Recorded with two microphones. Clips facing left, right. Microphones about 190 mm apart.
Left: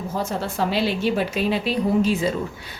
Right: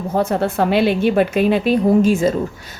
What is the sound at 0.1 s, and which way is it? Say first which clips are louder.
A woman's voice: right 10 dB; 60° right (ahead or behind).